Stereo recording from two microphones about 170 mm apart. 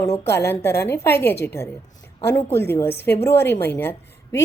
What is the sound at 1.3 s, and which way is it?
Speech, 75° left (ahead or behind).